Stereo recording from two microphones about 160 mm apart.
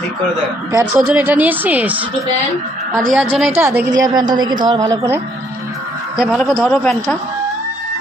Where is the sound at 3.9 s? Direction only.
25° right (ahead or behind).